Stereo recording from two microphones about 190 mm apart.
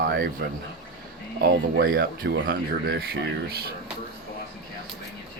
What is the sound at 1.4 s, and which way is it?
Speech, 50° right (ahead or behind).